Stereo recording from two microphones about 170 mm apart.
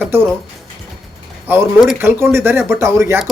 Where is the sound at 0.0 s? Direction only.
15° right (ahead or behind).